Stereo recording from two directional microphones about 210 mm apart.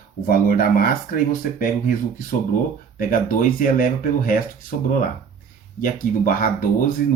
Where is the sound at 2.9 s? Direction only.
40° left (ahead or behind).